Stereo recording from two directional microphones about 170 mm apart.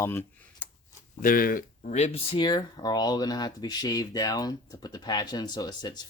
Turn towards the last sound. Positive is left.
turn(degrees=25)  # may be behind; listen again after turning